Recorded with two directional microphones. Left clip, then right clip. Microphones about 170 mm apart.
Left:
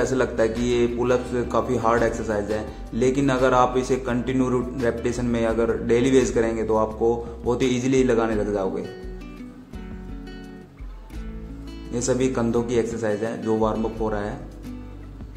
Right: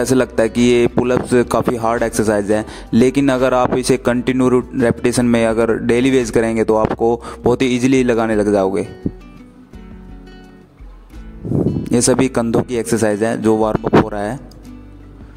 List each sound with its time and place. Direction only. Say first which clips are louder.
0.0 s speech: right 6 dB; 80° right
11.9 s speech: right 7 dB; 80° right